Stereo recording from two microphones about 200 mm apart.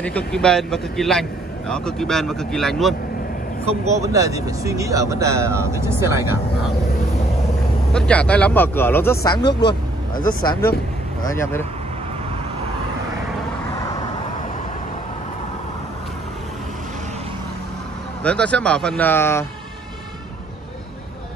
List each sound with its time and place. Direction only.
0.0 s speech: 5° left (ahead or behind)
4.0 s speech: 15° right (ahead or behind)
7.9 s speech: 5° left (ahead or behind)
9.5 s speech: 55° left (ahead or behind)
10.2 s speech: 20° left (ahead or behind)
18.2 s speech: 5° left (ahead or behind)